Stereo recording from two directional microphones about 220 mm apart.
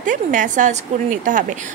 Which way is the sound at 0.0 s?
35° right (ahead or behind).